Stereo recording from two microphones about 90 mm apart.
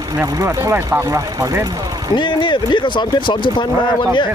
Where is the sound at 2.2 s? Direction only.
65° left (ahead or behind).